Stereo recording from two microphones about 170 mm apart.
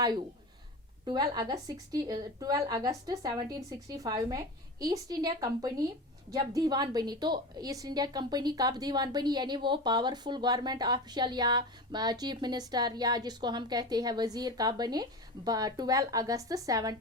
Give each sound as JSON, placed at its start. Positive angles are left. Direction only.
{"t": 1.0, "sound": "a woman's voice", "side_deg": -25}